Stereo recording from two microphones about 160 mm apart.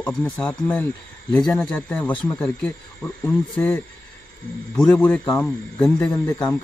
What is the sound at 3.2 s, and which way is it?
Speech, 10° left (ahead or behind).